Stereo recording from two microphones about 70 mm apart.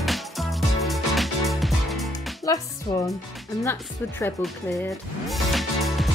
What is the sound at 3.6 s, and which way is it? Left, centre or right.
Speech, left.